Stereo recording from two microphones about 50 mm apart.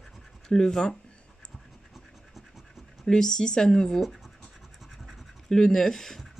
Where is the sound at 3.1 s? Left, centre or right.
Centre.